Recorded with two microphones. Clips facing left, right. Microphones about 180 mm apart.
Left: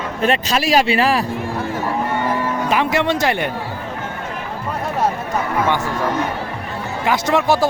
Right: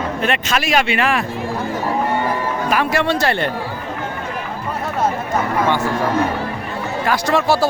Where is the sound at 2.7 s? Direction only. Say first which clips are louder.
Even; 20° left (ahead or behind).